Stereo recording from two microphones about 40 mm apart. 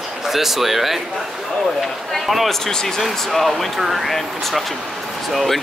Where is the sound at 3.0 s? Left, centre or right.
Centre.